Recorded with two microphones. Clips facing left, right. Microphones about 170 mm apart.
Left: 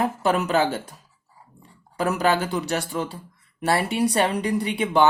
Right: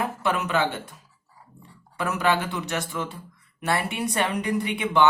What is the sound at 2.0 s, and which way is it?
Speech, 35° left (ahead or behind).